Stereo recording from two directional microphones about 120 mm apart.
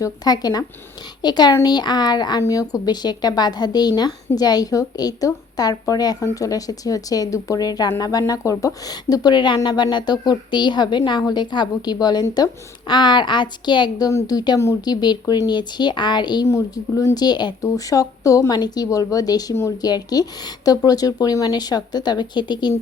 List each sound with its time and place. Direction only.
0.0 s speech: 35° left (ahead or behind)
14.1 s speech: 30° left (ahead or behind)
16.5 s speech: 25° left (ahead or behind)